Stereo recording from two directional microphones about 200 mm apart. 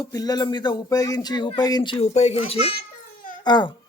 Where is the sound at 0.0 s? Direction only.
20° left (ahead or behind).